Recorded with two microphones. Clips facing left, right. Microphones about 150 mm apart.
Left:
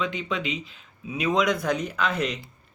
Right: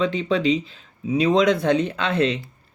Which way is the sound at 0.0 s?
35° right (ahead or behind).